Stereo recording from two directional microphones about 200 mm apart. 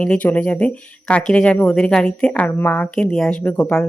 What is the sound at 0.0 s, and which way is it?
Speech, 5° left (ahead or behind).